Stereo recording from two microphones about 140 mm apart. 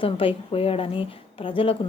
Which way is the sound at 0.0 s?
40° left (ahead or behind).